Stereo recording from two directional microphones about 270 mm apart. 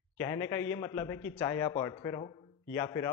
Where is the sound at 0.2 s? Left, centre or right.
Centre.